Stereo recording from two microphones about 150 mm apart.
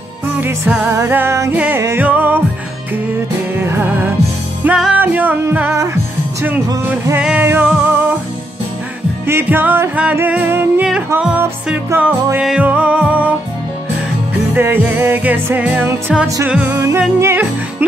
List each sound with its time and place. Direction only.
0.3 s music: 10° right (ahead or behind)
3.5 s music: 15° right (ahead or behind)
9.2 s music: 15° right (ahead or behind)
14.5 s music: 15° right (ahead or behind)